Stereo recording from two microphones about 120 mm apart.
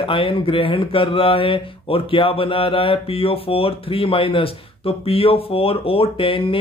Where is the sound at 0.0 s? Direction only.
45° left (ahead or behind).